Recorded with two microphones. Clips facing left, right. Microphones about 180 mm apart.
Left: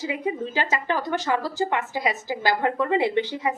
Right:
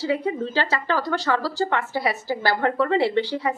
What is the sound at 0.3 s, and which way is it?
A woman's voice, 15° left (ahead or behind).